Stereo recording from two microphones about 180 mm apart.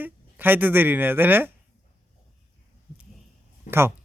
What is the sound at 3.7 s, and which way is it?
Speech, 40° left (ahead or behind).